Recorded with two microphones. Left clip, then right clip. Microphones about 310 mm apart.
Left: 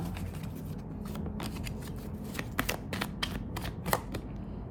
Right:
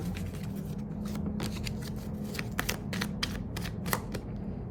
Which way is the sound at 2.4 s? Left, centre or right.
Centre.